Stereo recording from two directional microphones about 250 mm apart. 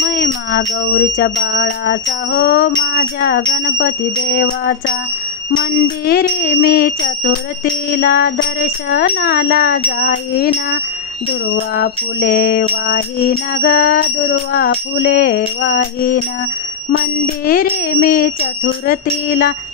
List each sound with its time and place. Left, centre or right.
0.0 s music: left
11.7 s music: left
17.5 s music: left